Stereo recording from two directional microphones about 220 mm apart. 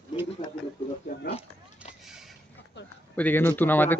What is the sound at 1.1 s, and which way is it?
Oink, 35° left (ahead or behind).